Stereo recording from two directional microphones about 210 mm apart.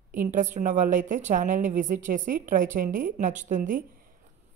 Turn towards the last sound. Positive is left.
turn(degrees=-35)  # may be behind; listen again after turning